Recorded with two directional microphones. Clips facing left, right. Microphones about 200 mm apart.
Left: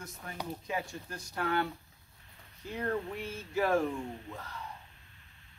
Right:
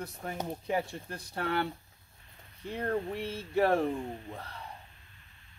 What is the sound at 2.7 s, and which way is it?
Speech, 30° right (ahead or behind).